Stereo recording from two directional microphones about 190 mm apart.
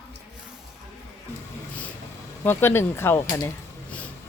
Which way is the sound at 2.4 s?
10° left (ahead or behind).